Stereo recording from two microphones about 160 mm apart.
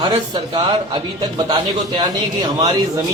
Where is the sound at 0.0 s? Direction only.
25° right (ahead or behind).